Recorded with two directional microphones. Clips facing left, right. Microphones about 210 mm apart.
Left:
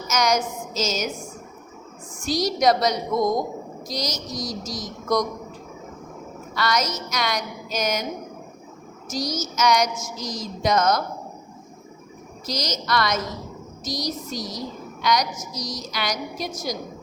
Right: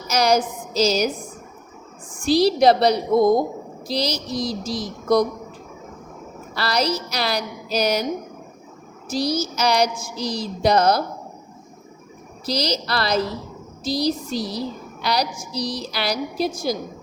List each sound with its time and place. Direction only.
0.1 s a woman's voice: 35° right (ahead or behind)
2.2 s a woman's voice: 30° right (ahead or behind)
6.5 s a woman's voice: 30° right (ahead or behind)
9.0 s a woman's voice: 30° right (ahead or behind)
12.5 s a woman's voice: 30° right (ahead or behind)